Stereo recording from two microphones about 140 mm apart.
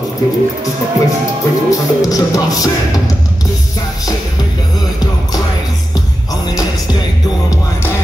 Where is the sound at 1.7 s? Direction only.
25° left (ahead or behind).